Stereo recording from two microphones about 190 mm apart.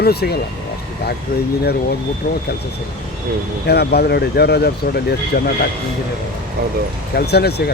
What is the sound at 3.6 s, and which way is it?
Speech, 60° left (ahead or behind).